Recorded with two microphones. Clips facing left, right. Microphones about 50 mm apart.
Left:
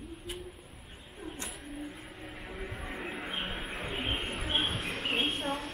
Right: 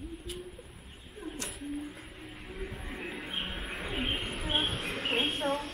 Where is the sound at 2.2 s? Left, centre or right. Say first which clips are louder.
Even; centre.